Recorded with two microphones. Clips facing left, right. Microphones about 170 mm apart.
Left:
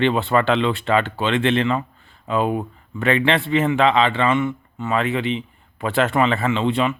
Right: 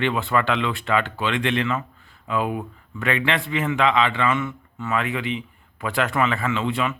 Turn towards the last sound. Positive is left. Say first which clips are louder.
# left 4 dB
turn(degrees=25)  # may be behind; listen again after turning